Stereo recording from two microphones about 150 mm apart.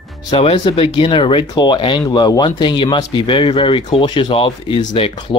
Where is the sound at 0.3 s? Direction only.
40° left (ahead or behind).